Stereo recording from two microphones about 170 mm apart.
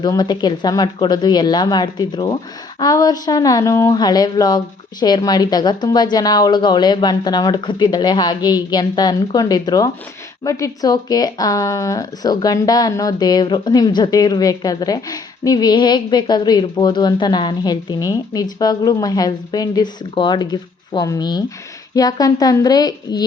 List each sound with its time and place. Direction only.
0.0 s speech: 25° left (ahead or behind)